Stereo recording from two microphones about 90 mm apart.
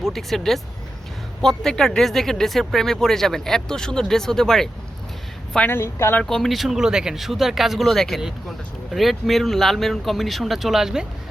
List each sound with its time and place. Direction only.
0.1 s speech: 5° left (ahead or behind)
5.5 s a woman's voice: 25° left (ahead or behind)
6.2 s speech: 5° left (ahead or behind)